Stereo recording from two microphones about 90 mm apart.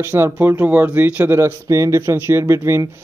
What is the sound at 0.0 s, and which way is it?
Speech, 25° right (ahead or behind).